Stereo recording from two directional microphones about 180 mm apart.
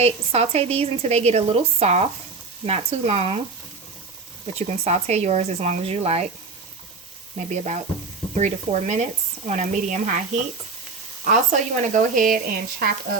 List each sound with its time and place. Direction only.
0.0 s speech: 35° right (ahead or behind)
4.5 s speech: 35° right (ahead or behind)
7.3 s speech: 40° right (ahead or behind)